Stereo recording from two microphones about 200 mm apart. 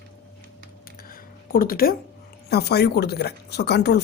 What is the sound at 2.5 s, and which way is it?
Speech, 55° left (ahead or behind).